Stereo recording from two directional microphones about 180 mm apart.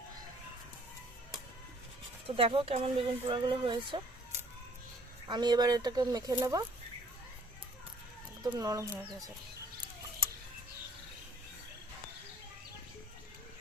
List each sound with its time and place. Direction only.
2.2 s speech: 30° right (ahead or behind)
5.3 s speech: 25° right (ahead or behind)
8.4 s speech: 20° right (ahead or behind)